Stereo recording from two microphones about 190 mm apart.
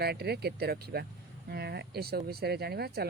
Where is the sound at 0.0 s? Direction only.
55° right (ahead or behind).